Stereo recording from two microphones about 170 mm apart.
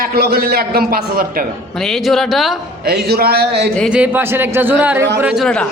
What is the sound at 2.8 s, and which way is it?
Speech, 65° right (ahead or behind).